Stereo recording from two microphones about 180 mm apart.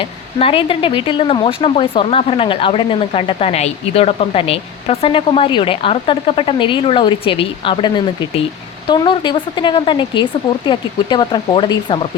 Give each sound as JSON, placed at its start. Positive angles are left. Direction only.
{"t": 0.0, "sound": "speech", "side_deg": 30}